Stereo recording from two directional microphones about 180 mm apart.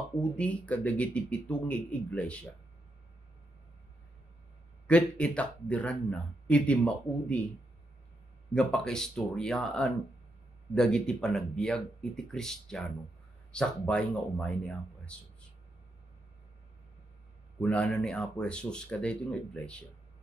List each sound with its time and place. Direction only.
0.2 s speech: 5° left (ahead or behind)
4.8 s speech: 5° left (ahead or behind)
8.5 s speech: 5° left (ahead or behind)
17.6 s speech: 5° left (ahead or behind)